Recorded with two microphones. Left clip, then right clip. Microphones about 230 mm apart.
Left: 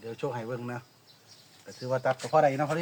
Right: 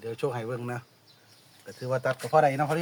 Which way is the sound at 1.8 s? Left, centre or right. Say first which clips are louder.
Even; right.